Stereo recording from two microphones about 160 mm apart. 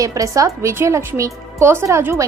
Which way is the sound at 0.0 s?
20° right (ahead or behind).